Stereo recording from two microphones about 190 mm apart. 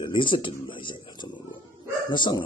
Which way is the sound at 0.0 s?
25° left (ahead or behind).